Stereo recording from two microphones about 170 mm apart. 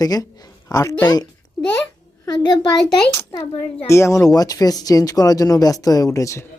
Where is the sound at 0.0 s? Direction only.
20° left (ahead or behind).